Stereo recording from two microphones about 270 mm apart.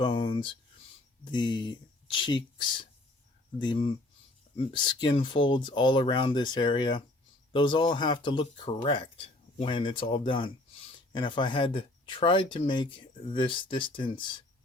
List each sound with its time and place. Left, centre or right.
0.0 s speech: centre